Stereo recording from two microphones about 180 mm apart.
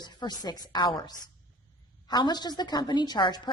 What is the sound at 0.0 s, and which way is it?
A woman's voice, 25° left (ahead or behind).